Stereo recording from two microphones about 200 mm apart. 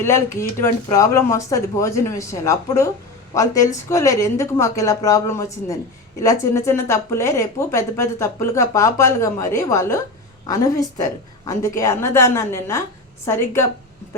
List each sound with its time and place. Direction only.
0.0 s speech: 15° left (ahead or behind)